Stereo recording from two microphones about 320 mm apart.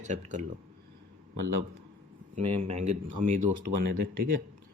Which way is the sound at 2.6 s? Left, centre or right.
Right.